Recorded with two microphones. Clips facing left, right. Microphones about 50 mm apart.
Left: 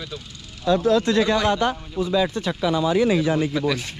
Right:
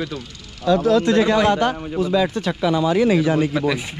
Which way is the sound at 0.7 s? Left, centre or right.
Right.